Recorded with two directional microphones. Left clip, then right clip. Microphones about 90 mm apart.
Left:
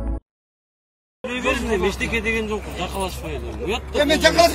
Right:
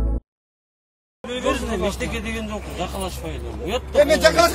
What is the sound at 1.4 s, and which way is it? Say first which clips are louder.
Speech: left 2 dB; 90° right.